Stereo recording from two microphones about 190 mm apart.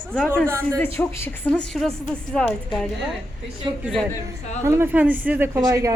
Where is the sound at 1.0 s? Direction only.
10° left (ahead or behind).